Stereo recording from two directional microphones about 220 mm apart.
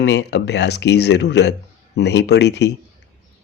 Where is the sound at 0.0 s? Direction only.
55° left (ahead or behind).